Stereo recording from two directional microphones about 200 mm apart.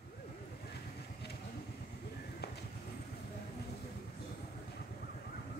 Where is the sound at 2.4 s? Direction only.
55° left (ahead or behind).